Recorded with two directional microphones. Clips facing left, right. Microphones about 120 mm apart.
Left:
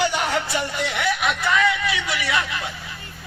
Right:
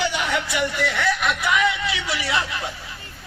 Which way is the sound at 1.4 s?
20° right (ahead or behind).